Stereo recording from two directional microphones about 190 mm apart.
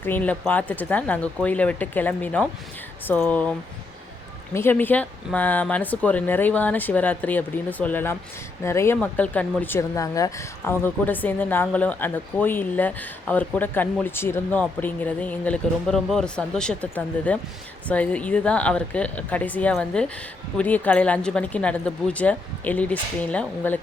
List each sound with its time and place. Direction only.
0.0 s speech: 10° left (ahead or behind)
4.5 s speech: 10° left (ahead or behind)